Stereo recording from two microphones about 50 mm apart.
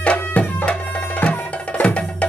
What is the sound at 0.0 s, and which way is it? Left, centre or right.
Music, left.